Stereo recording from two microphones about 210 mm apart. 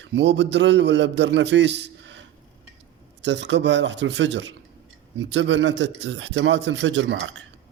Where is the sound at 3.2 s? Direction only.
55° right (ahead or behind).